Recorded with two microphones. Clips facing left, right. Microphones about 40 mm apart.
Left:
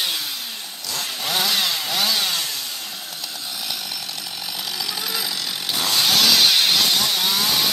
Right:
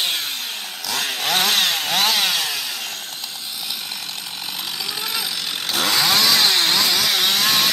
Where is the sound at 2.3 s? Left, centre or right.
Right.